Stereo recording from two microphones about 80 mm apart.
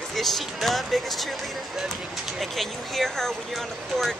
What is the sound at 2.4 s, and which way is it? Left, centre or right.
Speech, centre.